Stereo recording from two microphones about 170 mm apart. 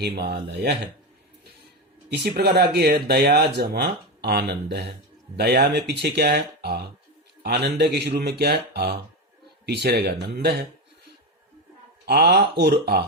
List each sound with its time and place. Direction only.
0.0 s speech: 75° right (ahead or behind)
2.0 s speech: 70° right (ahead or behind)
12.0 s speech: 75° right (ahead or behind)